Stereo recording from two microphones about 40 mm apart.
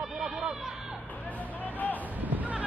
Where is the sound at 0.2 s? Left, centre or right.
Centre.